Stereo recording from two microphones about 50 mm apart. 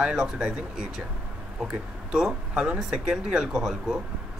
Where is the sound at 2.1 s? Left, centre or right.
Centre.